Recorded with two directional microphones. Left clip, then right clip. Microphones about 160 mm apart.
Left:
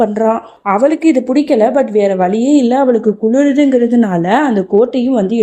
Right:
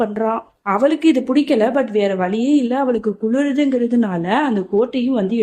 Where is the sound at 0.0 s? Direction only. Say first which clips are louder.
Left 7 dB; 20° left (ahead or behind).